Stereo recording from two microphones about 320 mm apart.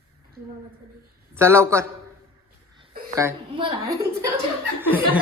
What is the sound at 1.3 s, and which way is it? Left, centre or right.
Speech, centre.